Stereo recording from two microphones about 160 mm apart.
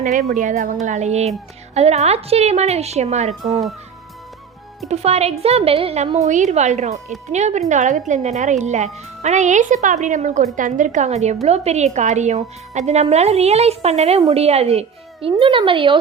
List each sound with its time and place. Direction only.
0.0 s a woman's voice: 60° right (ahead or behind); by 3.3 s 45° right (ahead or behind)
4.9 s a woman's voice: 40° right (ahead or behind)